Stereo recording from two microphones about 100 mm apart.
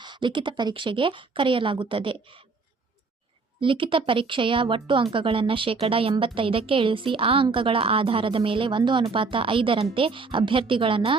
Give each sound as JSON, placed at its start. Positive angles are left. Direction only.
{"t": 0.0, "sound": "speech", "side_deg": -50}
{"t": 3.6, "sound": "speech", "side_deg": -60}